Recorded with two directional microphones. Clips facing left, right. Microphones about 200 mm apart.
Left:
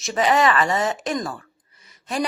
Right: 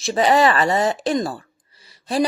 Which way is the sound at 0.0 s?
30° right (ahead or behind).